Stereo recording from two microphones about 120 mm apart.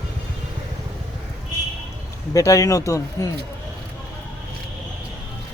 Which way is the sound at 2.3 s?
25° left (ahead or behind).